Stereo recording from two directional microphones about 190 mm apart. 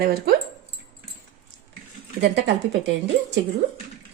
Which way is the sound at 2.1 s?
70° right (ahead or behind).